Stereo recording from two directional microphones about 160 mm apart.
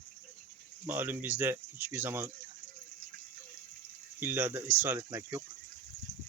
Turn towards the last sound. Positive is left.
turn(degrees=-20)  # may be behind; listen again after turning